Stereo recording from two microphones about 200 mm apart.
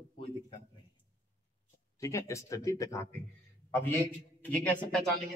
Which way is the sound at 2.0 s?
15° left (ahead or behind).